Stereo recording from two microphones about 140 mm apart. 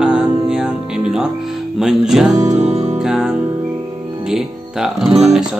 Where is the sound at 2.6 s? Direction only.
50° right (ahead or behind).